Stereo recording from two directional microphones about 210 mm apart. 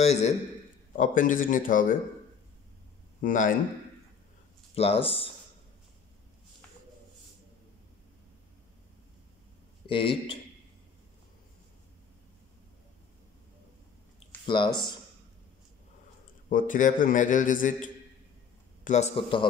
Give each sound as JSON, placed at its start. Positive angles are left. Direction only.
{"t": 0.0, "sound": "a man's voice", "side_deg": 30}
{"t": 3.2, "sound": "speech", "side_deg": 40}
{"t": 4.7, "sound": "a man's voice", "side_deg": 30}
{"t": 9.8, "sound": "a man's voice", "side_deg": 25}
{"t": 14.4, "sound": "speech", "side_deg": 20}
{"t": 16.4, "sound": "a man's voice", "side_deg": 40}